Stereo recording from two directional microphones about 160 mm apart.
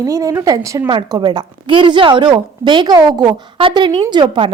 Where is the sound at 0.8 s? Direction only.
30° right (ahead or behind).